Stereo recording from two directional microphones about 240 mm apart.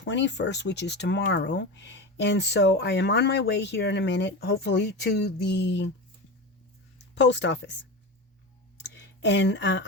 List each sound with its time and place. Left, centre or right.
0.0 s speech: left
7.2 s speech: left
8.9 s a sound: left